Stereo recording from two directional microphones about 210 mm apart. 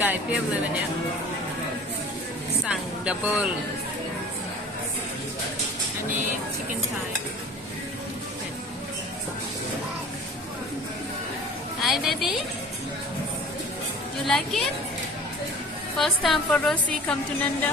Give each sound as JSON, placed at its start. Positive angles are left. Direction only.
{"t": 0.0, "sound": "speech", "side_deg": -10}
{"t": 2.6, "sound": "speech", "side_deg": -5}
{"t": 11.8, "sound": "a woman's voice", "side_deg": 0}
{"t": 14.3, "sound": "a woman's voice", "side_deg": 0}
{"t": 16.0, "sound": "a woman's voice", "side_deg": 0}